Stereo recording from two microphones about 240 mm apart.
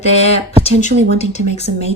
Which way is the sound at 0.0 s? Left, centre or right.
Left.